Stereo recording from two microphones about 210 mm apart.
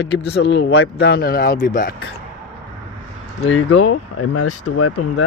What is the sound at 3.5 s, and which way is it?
Speech, 90° left.